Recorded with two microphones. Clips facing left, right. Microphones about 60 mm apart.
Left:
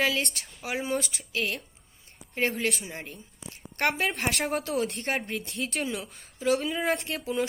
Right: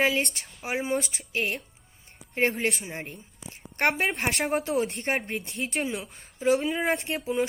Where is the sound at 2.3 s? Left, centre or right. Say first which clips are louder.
Right 2 dB; right.